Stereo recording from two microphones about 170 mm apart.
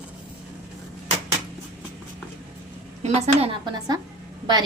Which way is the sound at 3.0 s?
40° right (ahead or behind).